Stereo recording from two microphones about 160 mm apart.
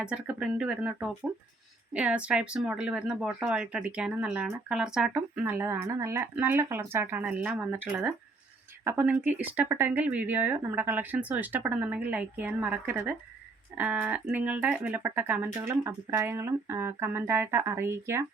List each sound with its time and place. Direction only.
0.0 s speech: 5° right (ahead or behind)